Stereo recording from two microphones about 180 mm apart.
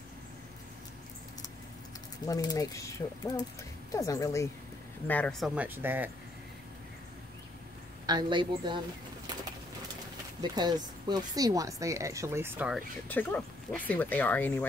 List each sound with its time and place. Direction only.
2.2 s speech: 20° left (ahead or behind)
5.5 s speech: 10° right (ahead or behind)
8.1 s a woman's voice: 25° right (ahead or behind)
10.4 s speech: 25° right (ahead or behind); by 12.8 s 5° right (ahead or behind)
13.1 s speech: 10° left (ahead or behind)